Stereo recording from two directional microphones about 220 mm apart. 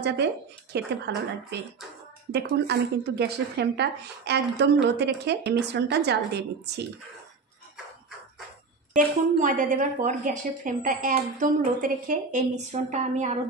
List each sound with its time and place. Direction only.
0.0 s speech: 50° right (ahead or behind)
9.4 s a woman's voice: 35° right (ahead or behind)